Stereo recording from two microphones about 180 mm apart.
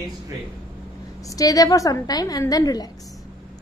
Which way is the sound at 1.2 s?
20° left (ahead or behind).